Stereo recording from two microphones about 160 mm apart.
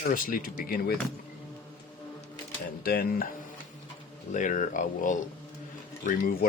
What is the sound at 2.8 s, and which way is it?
Speech, 70° left (ahead or behind).